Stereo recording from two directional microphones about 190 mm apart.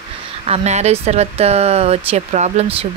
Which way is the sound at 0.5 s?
35° right (ahead or behind).